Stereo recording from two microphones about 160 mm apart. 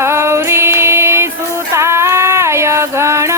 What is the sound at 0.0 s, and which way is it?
Music, 15° right (ahead or behind).